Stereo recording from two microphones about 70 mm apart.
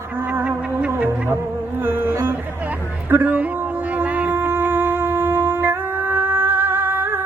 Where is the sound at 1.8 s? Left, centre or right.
Right.